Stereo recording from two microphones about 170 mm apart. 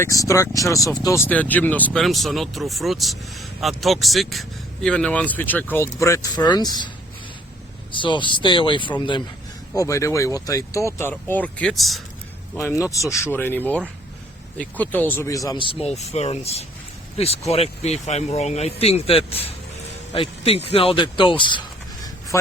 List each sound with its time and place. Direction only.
0.0 s speech: 20° left (ahead or behind)
7.9 s speech: 30° left (ahead or behind); by 12.0 s centre (ahead or behind)
12.5 s speech: 15° left (ahead or behind)